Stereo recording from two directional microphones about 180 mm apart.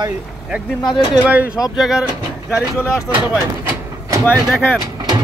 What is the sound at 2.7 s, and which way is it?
Speech, 15° left (ahead or behind).